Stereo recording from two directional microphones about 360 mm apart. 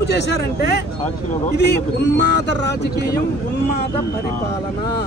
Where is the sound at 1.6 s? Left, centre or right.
Left.